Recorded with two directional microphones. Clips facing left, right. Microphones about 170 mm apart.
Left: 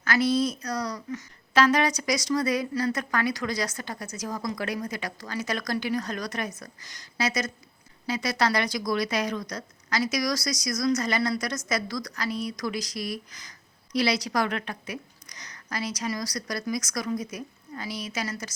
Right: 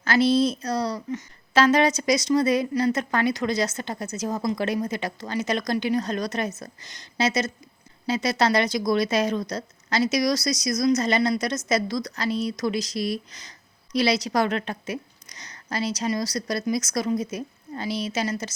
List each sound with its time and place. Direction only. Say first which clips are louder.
0.0 s a woman's voice: right 4 dB; 30° right (ahead or behind)